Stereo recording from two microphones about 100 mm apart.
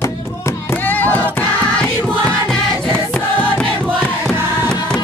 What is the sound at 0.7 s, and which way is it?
Music, 15° left (ahead or behind).